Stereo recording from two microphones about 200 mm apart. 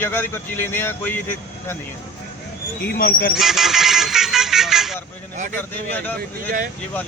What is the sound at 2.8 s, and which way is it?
Speech, 50° left (ahead or behind).